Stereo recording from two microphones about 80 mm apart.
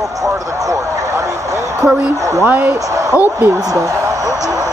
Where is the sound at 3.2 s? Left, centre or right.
Right.